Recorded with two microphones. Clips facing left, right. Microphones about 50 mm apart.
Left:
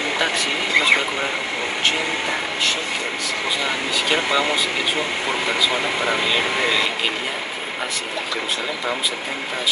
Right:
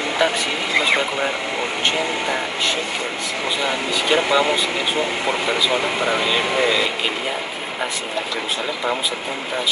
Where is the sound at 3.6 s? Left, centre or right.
Centre.